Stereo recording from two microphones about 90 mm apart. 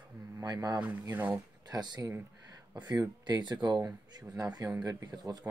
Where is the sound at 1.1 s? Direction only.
20° right (ahead or behind).